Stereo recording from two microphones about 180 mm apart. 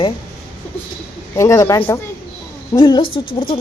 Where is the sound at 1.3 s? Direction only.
15° left (ahead or behind).